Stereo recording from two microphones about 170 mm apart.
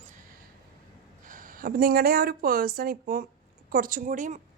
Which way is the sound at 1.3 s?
55° right (ahead or behind).